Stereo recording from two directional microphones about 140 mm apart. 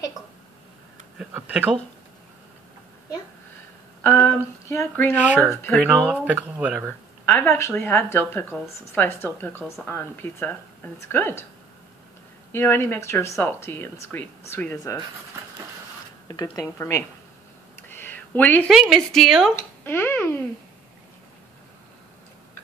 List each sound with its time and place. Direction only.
1.1 s speech: 10° right (ahead or behind)
4.0 s speech: 10° left (ahead or behind)
5.7 s a woman's voice: centre (ahead or behind)
6.0 s speech: 10° right (ahead or behind)
7.2 s speech: 15° left (ahead or behind)
12.5 s speech: 15° left (ahead or behind)
16.7 s speech: 20° left (ahead or behind)
17.8 s a sound: 15° left (ahead or behind)
18.7 s a woman's voice: centre (ahead or behind)
19.8 s speech: 15° left (ahead or behind)